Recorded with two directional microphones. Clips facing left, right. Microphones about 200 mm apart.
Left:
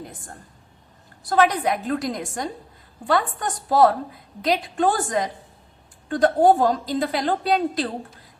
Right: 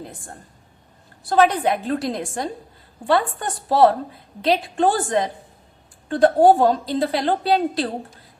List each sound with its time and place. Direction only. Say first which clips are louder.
1.3 s a woman's voice: right 2 dB; 30° right (ahead or behind)